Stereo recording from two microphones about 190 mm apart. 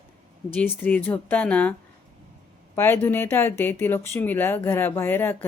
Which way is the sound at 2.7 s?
10° left (ahead or behind).